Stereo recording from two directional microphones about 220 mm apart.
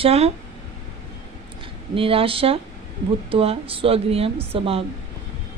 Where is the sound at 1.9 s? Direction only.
25° right (ahead or behind).